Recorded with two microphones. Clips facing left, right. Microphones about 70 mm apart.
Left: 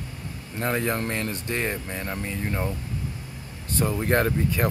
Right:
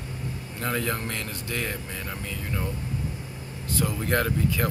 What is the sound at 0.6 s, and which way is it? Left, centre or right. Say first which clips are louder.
Speech: left 3 dB; left.